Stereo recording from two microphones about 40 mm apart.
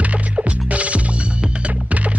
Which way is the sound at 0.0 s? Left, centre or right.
Right.